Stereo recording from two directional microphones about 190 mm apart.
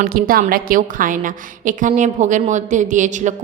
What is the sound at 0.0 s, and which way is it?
A woman's voice, 50° right (ahead or behind).